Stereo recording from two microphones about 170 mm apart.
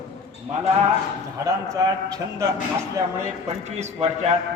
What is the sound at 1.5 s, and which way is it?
A man's voice, 20° right (ahead or behind).